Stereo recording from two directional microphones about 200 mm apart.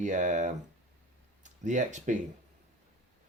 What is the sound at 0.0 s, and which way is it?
Speech, 40° right (ahead or behind).